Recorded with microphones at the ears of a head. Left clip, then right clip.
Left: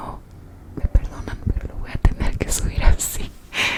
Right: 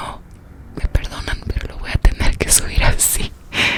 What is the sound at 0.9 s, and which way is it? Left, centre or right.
Whispering, right.